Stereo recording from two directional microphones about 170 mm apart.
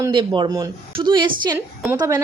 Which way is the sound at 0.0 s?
25° right (ahead or behind).